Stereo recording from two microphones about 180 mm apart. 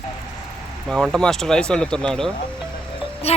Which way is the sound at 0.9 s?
5° left (ahead or behind).